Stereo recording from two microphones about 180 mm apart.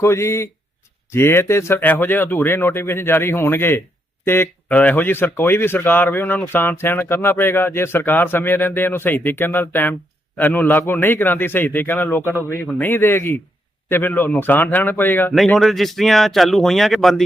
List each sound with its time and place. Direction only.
0.0 s speech: 15° left (ahead or behind)